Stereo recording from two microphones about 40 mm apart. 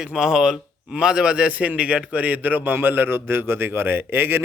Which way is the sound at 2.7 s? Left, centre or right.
Right.